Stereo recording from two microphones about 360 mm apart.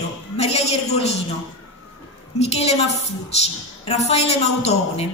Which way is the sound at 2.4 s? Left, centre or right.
Centre.